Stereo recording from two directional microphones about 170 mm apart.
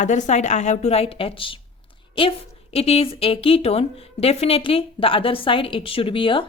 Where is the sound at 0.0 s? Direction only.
45° left (ahead or behind).